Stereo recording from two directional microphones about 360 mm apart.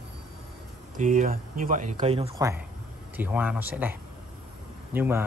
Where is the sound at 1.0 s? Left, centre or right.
Right.